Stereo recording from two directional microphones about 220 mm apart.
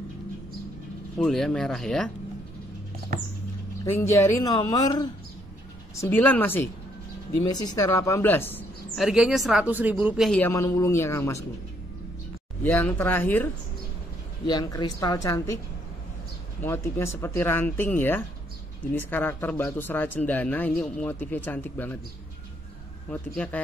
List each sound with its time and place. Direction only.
1.1 s speech: centre (ahead or behind)
3.8 s speech: 10° left (ahead or behind)
12.6 s speech: 10° left (ahead or behind)
16.6 s speech: 10° left (ahead or behind)
23.0 s speech: 5° left (ahead or behind)